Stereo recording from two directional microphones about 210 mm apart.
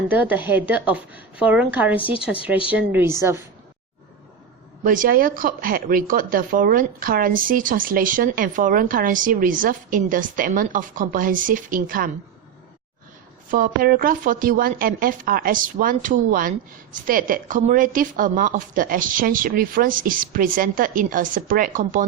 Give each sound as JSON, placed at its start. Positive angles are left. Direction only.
{"t": 0.1, "sound": "a woman's voice", "side_deg": -10}
{"t": 4.8, "sound": "a woman's voice", "side_deg": -40}
{"t": 13.5, "sound": "a woman's voice", "side_deg": -45}